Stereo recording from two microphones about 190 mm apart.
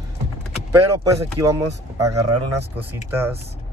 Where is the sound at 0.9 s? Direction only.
15° right (ahead or behind).